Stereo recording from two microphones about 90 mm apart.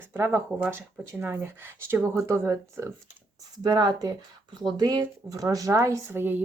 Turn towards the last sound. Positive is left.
turn(degrees=-20)  # may be behind; listen again after turning